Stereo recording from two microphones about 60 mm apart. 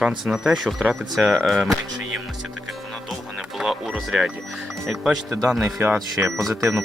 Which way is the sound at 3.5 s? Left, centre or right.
Centre.